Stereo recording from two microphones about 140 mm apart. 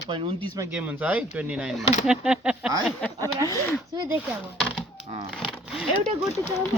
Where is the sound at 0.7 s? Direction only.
10° right (ahead or behind).